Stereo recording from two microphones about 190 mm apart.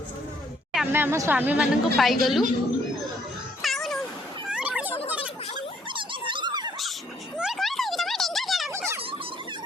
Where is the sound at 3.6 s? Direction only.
Centre (ahead or behind).